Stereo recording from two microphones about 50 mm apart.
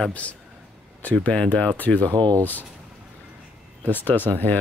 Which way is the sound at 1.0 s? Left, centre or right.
Left.